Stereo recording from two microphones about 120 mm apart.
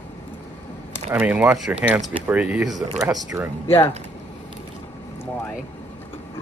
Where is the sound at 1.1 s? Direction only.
10° right (ahead or behind).